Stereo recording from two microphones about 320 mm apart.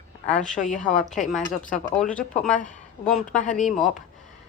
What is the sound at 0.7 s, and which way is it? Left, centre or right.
Speech, left.